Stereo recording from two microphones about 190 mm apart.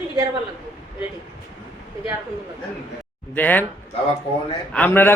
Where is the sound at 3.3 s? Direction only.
10° left (ahead or behind).